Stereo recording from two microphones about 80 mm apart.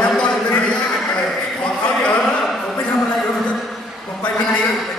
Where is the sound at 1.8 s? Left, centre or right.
Centre.